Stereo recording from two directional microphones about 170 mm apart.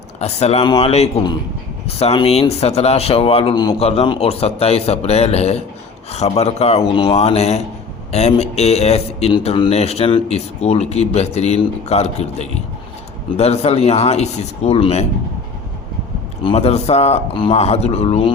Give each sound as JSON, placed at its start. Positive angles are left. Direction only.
{"t": 0.2, "sound": "speech", "side_deg": 40}
{"t": 3.8, "sound": "speech", "side_deg": 35}
{"t": 16.4, "sound": "speech", "side_deg": 35}